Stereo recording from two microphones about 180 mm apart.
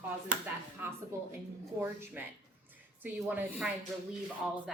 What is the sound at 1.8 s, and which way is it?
A woman's voice, 15° right (ahead or behind).